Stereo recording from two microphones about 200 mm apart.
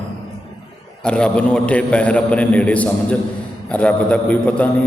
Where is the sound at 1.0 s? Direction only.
5° left (ahead or behind).